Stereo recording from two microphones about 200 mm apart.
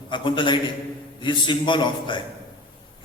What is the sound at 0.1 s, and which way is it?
A man's voice, 25° left (ahead or behind).